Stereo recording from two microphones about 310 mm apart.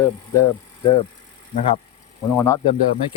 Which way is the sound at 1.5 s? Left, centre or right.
Centre.